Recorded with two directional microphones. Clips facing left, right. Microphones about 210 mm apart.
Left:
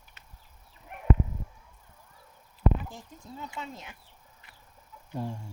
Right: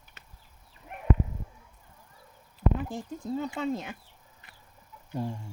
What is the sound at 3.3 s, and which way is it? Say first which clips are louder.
Speech: right 10 dB; 60° right (ahead or behind).